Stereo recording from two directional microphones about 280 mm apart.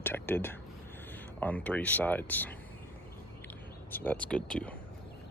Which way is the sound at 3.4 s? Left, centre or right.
Centre.